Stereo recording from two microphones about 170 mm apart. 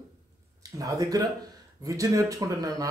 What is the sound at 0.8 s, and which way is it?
Speech, 20° right (ahead or behind).